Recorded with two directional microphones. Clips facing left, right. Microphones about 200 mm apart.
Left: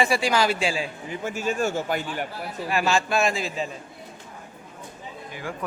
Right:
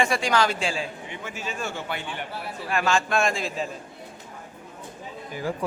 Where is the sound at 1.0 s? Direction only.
45° left (ahead or behind).